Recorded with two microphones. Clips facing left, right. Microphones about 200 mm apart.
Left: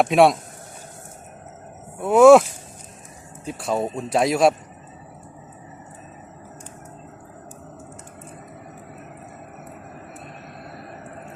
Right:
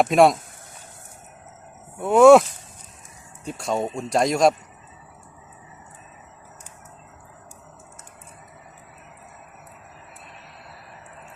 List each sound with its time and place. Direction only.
0.0 s speech: centre (ahead or behind)
2.0 s speech: centre (ahead or behind)
3.4 s speech: centre (ahead or behind)
10.8 s vehicle: 50° left (ahead or behind)